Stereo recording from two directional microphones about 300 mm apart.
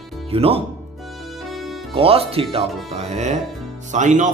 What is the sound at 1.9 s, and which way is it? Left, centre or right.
Speech, centre.